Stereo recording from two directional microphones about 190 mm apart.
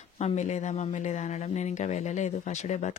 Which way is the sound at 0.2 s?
35° left (ahead or behind).